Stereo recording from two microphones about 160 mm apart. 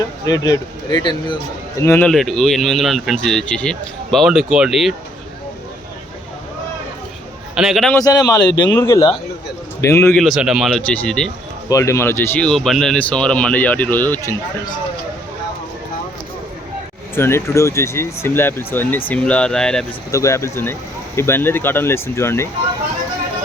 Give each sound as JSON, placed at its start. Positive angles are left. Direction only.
{"t": 0.3, "sound": "speech", "side_deg": 20}
{"t": 1.8, "sound": "speech", "side_deg": 15}
{"t": 2.0, "sound": "speech", "side_deg": 0}
{"t": 7.5, "sound": "a man's voice", "side_deg": -5}
{"t": 7.9, "sound": "speech", "side_deg": 25}
{"t": 10.2, "sound": "speech", "side_deg": 0}
{"t": 11.7, "sound": "speech", "side_deg": 20}
{"t": 17.2, "sound": "speech", "side_deg": 15}
{"t": 20.1, "sound": "speech", "side_deg": 20}